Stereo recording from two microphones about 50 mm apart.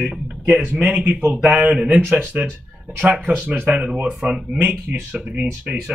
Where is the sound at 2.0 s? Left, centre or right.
Centre.